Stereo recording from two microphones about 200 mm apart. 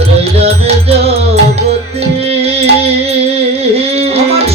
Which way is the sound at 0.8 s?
30° right (ahead or behind).